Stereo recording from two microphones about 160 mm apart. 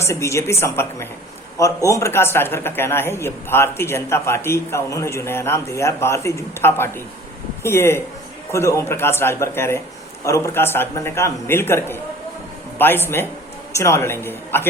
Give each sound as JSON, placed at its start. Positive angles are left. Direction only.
{"t": 0.0, "sound": "speech", "side_deg": 20}